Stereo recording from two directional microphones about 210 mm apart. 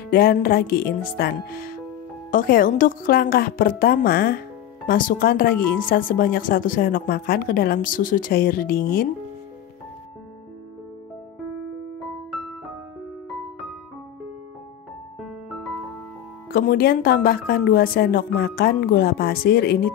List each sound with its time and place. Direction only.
0.1 s speech: 45° left (ahead or behind)
15.1 s music: centre (ahead or behind)
16.4 s speech: 45° left (ahead or behind)